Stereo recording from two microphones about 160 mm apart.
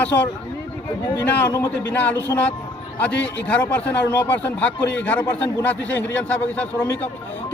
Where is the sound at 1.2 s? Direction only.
10° left (ahead or behind).